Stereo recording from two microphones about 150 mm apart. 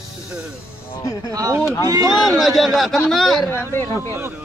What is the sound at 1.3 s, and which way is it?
Speech, 25° right (ahead or behind).